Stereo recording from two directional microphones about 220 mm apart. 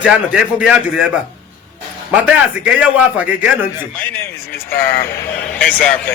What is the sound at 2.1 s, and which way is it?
A man's voice, 5° right (ahead or behind).